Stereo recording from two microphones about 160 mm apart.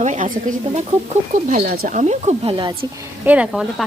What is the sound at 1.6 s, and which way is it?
Speech, 70° right (ahead or behind).